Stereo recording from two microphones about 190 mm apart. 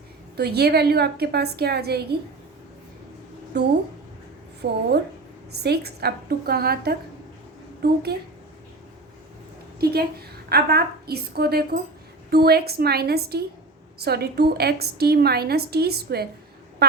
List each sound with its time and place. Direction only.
0.3 s a woman's voice: 60° right (ahead or behind)
3.5 s a woman's voice: 60° right (ahead or behind)
9.8 s a woman's voice: 55° right (ahead or behind)